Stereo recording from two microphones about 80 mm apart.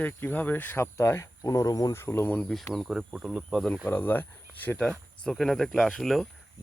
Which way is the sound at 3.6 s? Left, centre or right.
Centre.